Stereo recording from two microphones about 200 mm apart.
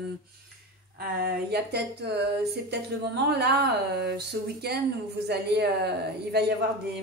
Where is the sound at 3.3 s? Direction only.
55° right (ahead or behind).